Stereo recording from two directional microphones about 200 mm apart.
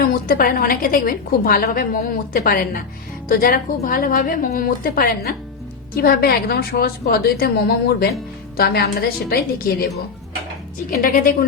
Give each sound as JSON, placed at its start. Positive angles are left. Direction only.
{"t": 0.0, "sound": "a woman's voice", "side_deg": 45}
{"t": 10.9, "sound": "a woman's voice", "side_deg": 45}